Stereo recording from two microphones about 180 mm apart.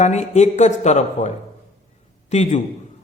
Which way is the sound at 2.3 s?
40° left (ahead or behind).